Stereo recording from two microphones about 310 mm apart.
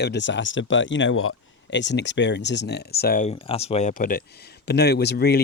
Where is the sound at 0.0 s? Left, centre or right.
Left.